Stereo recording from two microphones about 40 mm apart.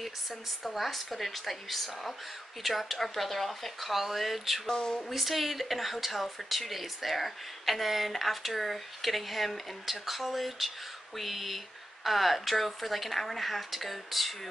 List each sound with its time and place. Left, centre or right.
0.7 s speech: centre
4.6 s speech: centre
5.1 s speech: centre